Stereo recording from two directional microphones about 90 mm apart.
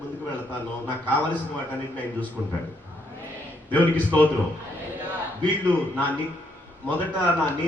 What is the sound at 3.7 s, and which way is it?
Speech, 15° left (ahead or behind).